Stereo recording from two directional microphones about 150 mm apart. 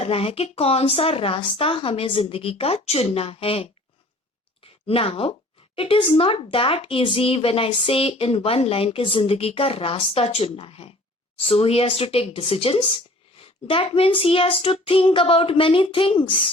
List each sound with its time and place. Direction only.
0.0 s speech: 40° left (ahead or behind)